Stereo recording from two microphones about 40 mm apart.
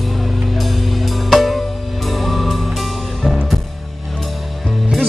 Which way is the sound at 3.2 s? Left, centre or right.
Centre.